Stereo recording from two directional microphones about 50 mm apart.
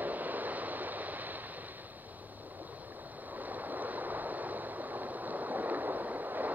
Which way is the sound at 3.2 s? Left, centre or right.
Right.